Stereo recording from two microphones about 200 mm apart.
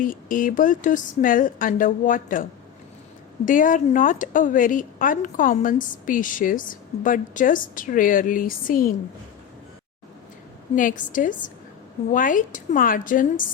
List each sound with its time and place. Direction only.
0.0 s a woman's voice: 45° left (ahead or behind)
10.8 s a woman's voice: 40° left (ahead or behind)